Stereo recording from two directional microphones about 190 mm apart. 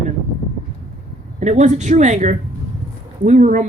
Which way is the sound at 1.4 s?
40° right (ahead or behind).